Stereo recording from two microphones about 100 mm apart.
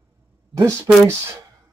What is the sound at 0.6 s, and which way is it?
Speech, 30° right (ahead or behind).